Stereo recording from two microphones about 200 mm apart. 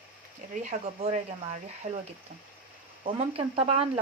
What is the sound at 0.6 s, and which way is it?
Speech, 35° right (ahead or behind).